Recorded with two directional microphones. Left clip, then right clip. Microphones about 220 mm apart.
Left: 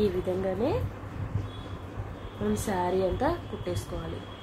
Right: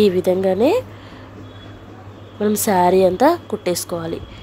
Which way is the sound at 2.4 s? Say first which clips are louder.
Right 14 dB; 35° right (ahead or behind).